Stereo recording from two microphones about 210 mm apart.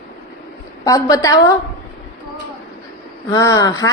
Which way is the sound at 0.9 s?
15° left (ahead or behind).